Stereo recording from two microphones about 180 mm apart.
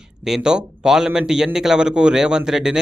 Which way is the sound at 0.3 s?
5° right (ahead or behind).